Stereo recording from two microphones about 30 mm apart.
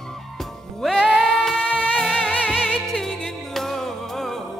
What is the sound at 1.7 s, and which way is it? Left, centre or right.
Music, right.